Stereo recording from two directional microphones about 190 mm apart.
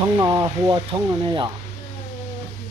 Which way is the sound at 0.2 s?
20° right (ahead or behind).